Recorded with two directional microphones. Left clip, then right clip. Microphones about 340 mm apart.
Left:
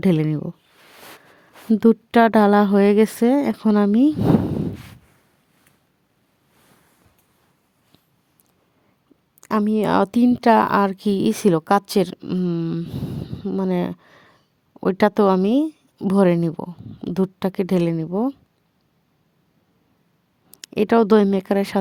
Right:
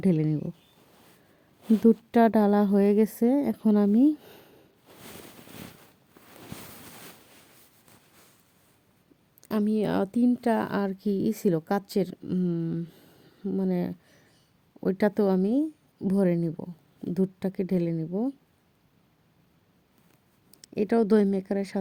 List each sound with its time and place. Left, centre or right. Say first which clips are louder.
0.0 s speech: left 6 dB; left
1.8 s speech: left 6 dB; left
9.4 s speech: left 7 dB; centre
20.5 s speech: left 8 dB; left